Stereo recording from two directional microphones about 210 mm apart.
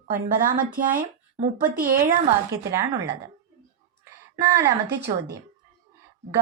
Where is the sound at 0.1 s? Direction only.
40° right (ahead or behind).